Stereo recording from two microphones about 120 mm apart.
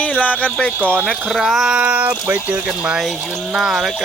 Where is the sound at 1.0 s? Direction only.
Centre (ahead or behind).